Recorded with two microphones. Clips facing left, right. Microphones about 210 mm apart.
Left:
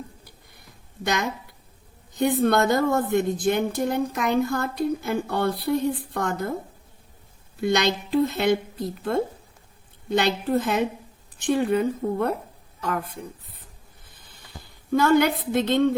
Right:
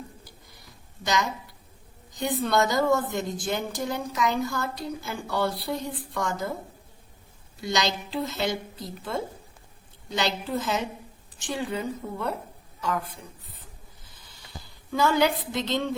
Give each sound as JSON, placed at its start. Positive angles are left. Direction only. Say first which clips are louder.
{"t": 1.0, "sound": "a woman's voice", "louder": "left 1 dB", "side_deg": 55}
{"t": 7.6, "sound": "a woman's voice", "louder": "left 5 dB", "side_deg": 55}
{"t": 14.0, "sound": "a sound", "louder": "left 1 dB", "side_deg": 55}